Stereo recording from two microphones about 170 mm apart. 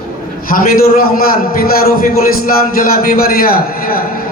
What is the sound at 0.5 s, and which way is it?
A man's voice, 55° left (ahead or behind).